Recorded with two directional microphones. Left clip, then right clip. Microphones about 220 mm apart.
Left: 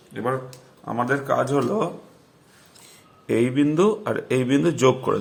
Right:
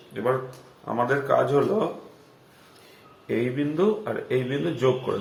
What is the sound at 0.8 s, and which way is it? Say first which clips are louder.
Speech: left 1 dB; 35° left (ahead or behind).